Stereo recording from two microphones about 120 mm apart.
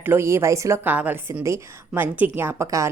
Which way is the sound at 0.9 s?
15° right (ahead or behind).